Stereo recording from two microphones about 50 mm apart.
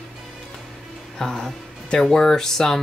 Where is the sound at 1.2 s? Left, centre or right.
Centre.